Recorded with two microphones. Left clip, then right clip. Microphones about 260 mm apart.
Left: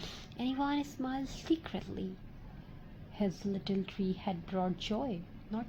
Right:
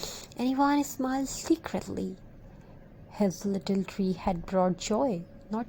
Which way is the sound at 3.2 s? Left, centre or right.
Right.